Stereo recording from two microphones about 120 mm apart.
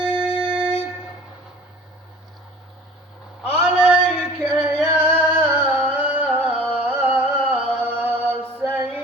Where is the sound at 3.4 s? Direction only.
15° right (ahead or behind).